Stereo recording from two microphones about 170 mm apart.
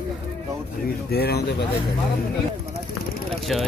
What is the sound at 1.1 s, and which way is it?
Speech, 70° left (ahead or behind).